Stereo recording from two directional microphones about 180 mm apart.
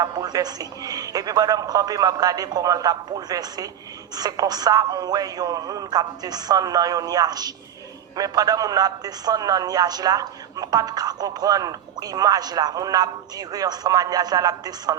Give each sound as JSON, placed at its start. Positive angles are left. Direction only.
{"t": 0.0, "sound": "speech", "side_deg": -20}